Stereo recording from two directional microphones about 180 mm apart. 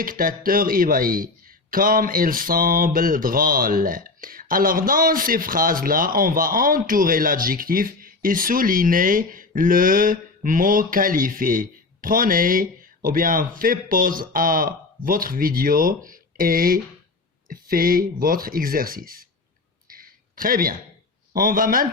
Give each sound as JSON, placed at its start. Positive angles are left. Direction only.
{"t": 0.0, "sound": "speech", "side_deg": -50}
{"t": 19.9, "sound": "a sound", "side_deg": -50}
{"t": 21.3, "sound": "speech", "side_deg": -50}